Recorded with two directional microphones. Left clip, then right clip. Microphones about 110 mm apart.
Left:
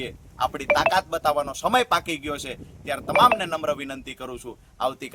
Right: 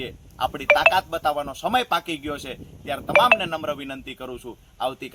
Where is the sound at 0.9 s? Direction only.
60° left (ahead or behind).